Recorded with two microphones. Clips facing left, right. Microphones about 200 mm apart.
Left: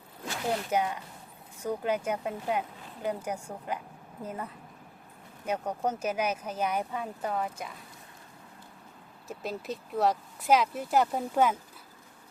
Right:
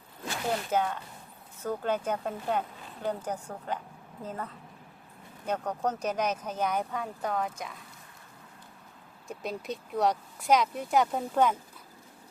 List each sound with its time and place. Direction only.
0.7 s speech: 10° left (ahead or behind)
9.2 s speech: 5° left (ahead or behind)